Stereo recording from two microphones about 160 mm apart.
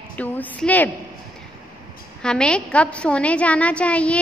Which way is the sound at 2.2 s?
5° left (ahead or behind).